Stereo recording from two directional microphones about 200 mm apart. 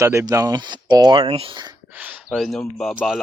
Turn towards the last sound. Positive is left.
turn(degrees=0)  # may be behind; listen again after turning